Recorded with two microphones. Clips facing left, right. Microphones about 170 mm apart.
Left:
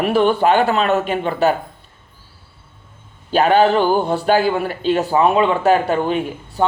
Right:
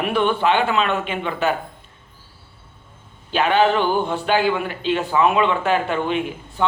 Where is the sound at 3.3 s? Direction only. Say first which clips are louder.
Left 4 dB; 40° left (ahead or behind).